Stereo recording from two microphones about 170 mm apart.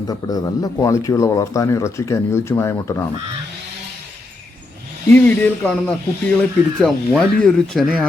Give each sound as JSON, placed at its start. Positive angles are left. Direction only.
{"t": 0.1, "sound": "speech", "side_deg": 20}
{"t": 5.1, "sound": "speech", "side_deg": 10}